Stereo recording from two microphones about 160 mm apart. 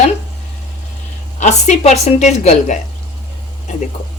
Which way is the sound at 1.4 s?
45° left (ahead or behind).